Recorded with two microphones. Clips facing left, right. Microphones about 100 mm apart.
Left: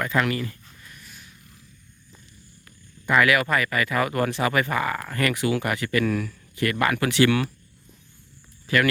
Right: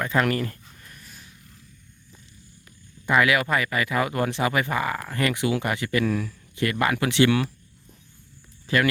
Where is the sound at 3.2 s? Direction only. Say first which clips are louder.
Left 2 dB; 20° right (ahead or behind).